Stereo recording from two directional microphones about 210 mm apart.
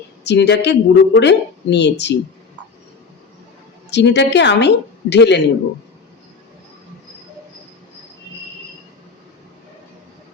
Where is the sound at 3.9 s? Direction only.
55° left (ahead or behind).